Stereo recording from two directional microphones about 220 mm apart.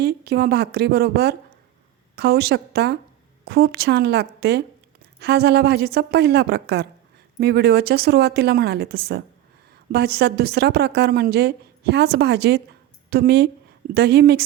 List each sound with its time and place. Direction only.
0.0 s a woman's voice: 45° right (ahead or behind)